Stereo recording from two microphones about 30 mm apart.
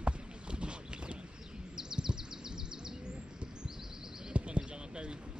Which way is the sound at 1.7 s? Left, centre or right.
Right.